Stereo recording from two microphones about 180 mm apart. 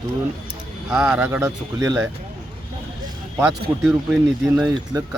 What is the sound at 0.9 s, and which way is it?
Speech, 5° right (ahead or behind).